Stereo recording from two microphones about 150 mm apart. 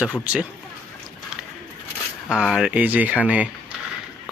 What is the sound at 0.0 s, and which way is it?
Speech, 10° right (ahead or behind).